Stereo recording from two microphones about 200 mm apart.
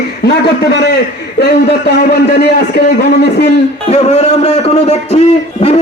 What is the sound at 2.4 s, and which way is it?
A man's voice, 55° left (ahead or behind).